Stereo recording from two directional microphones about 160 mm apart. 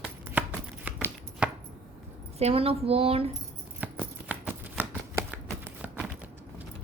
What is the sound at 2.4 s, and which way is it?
Speech, 35° right (ahead or behind).